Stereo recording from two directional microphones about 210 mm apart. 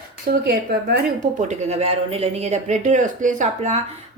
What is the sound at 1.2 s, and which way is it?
Speech, 35° right (ahead or behind).